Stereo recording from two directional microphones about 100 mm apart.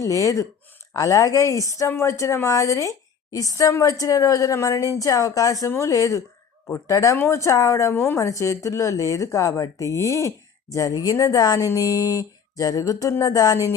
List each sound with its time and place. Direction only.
0.0 s a woman's voice: 35° left (ahead or behind)